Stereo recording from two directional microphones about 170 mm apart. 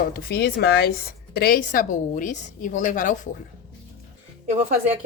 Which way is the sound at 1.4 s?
60° left (ahead or behind).